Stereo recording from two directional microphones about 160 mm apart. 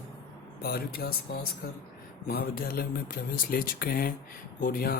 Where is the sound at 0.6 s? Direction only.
70° left (ahead or behind).